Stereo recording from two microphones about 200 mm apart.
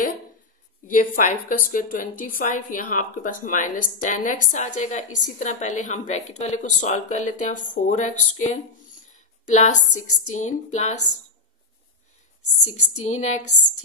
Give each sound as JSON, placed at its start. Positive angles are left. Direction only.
{"t": 0.8, "sound": "a woman's voice", "side_deg": 40}
{"t": 12.6, "sound": "a woman's voice", "side_deg": 35}